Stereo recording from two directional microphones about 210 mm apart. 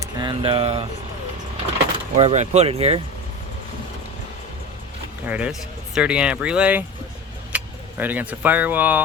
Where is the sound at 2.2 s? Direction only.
30° right (ahead or behind).